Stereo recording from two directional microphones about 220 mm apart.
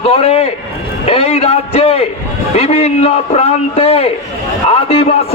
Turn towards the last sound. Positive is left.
turn(degrees=25)  # may be behind; listen again after turning